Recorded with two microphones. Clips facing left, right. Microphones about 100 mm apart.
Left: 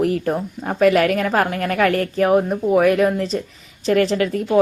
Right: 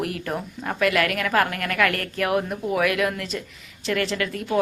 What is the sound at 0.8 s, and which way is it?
A woman's voice, 40° left (ahead or behind).